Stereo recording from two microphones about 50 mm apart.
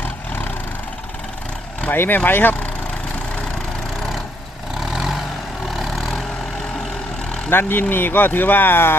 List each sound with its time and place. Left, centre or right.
1.9 s speech: left
4.9 s vehicle: centre
7.6 s speech: left